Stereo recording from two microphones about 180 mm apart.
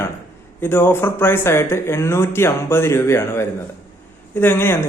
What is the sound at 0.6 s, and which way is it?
Speech, 10° left (ahead or behind).